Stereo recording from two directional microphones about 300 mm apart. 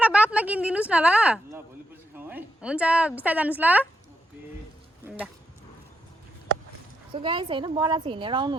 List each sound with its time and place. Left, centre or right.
0.0 s a sound: centre
2.1 s a woman's voice: centre
7.1 s a woman's voice: centre